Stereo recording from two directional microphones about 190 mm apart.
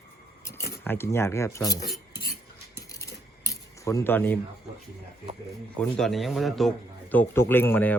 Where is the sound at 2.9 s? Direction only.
15° left (ahead or behind).